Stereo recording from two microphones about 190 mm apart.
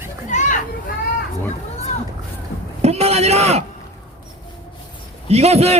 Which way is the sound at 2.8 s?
35° right (ahead or behind).